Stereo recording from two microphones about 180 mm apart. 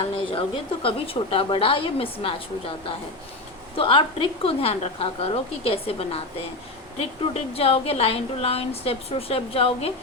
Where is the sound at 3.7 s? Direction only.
30° left (ahead or behind).